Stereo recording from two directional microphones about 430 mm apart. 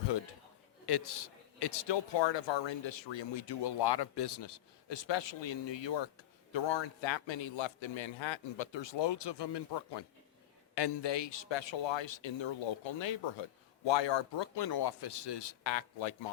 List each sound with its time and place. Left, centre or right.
0.9 s a man's voice: left